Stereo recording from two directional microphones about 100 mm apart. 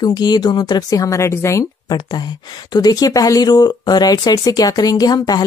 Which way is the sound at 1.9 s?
45° left (ahead or behind).